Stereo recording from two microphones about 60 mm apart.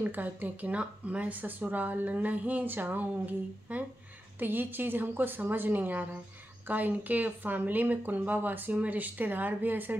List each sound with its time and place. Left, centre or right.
0.0 s a woman's voice: right